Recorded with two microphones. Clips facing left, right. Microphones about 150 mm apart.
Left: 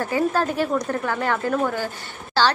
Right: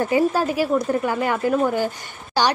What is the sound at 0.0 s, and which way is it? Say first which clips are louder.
A woman's voice: right 3 dB; 15° right (ahead or behind).